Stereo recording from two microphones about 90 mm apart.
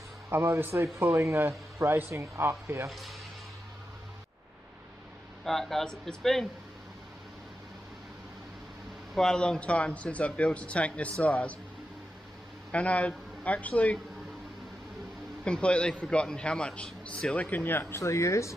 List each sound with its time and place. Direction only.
0.3 s speech: 25° right (ahead or behind)
2.9 s speech: centre (ahead or behind)
5.4 s speech: 5° left (ahead or behind)
9.1 s a man's voice: 5° left (ahead or behind)
12.7 s a man's voice: 15° left (ahead or behind)
15.4 s a man's voice: 10° left (ahead or behind); by 18.5 s 35° left (ahead or behind)